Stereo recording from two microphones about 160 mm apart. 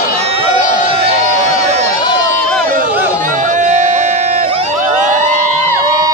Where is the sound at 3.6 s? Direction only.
45° right (ahead or behind).